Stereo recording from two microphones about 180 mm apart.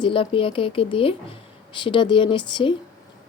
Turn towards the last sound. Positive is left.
turn(degrees=25)  # may be behind; listen again after turning